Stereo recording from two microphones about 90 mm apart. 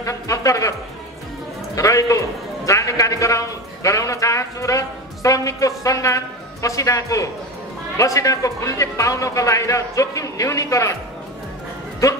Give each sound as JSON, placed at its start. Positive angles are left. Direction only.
{"t": 0.0, "sound": "a man's voice", "side_deg": 35}
{"t": 1.8, "sound": "a man's voice", "side_deg": 35}
{"t": 12.0, "sound": "a man's voice", "side_deg": 35}